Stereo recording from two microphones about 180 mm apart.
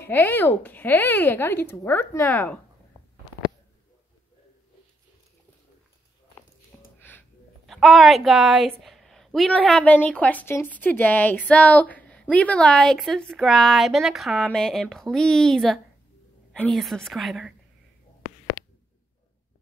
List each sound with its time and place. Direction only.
0.0 s speech: 10° left (ahead or behind)
7.0 s a woman's voice: 10° left (ahead or behind)
18.6 s a sound: 20° left (ahead or behind)